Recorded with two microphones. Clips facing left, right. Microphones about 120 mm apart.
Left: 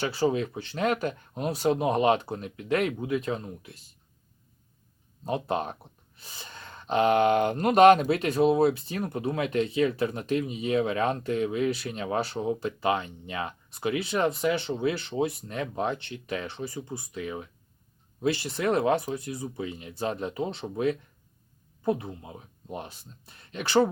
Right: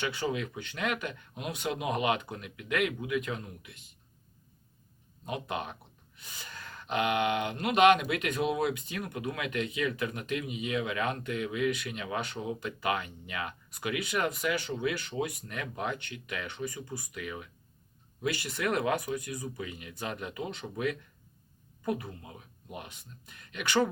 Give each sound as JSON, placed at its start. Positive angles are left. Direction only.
{"t": 0.0, "sound": "speech", "side_deg": 35}
{"t": 5.2, "sound": "speech", "side_deg": 35}